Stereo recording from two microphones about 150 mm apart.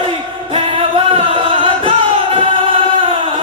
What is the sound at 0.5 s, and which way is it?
Music, 35° right (ahead or behind).